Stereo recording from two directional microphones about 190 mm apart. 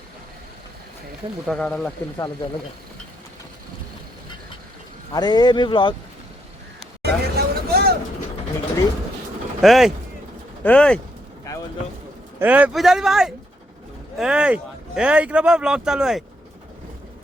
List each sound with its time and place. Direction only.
1.5 s speech: 5° left (ahead or behind)
2.1 s speech: 20° left (ahead or behind)
5.1 s speech: 20° left (ahead or behind)
7.0 s a sound: 55° right (ahead or behind)
9.6 s speech: centre (ahead or behind)
12.4 s speech: 10° right (ahead or behind)